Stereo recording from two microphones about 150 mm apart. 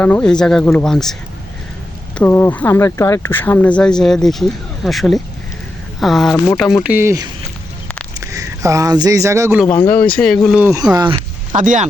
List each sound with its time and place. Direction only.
0.0 s speech: 10° left (ahead or behind)
2.1 s speech: 15° left (ahead or behind)
6.8 s speech: 15° right (ahead or behind)
8.3 s speech: 20° right (ahead or behind)
9.6 s speech: 10° left (ahead or behind)
10.9 s speech: 30° right (ahead or behind)
11.5 s speech: 60° right (ahead or behind)